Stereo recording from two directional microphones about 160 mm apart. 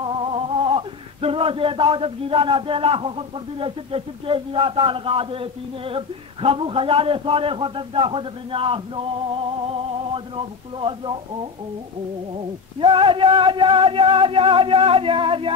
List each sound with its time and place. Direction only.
0.0 s male singing: 30° right (ahead or behind)
3.5 s a man's voice: 35° right (ahead or behind)
12.8 s a man's voice: 35° right (ahead or behind)